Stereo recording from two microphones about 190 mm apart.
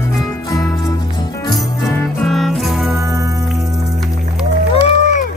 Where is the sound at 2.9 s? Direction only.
15° right (ahead or behind).